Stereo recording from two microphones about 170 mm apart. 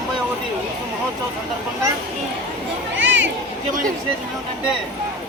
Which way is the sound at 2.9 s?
90° right.